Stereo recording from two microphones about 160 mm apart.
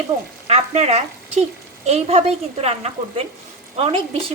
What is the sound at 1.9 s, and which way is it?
Sizzle, 45° right (ahead or behind).